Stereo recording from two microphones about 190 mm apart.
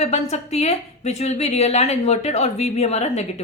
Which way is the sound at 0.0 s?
35° left (ahead or behind).